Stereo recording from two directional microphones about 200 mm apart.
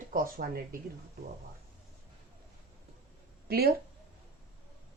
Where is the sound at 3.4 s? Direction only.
50° right (ahead or behind).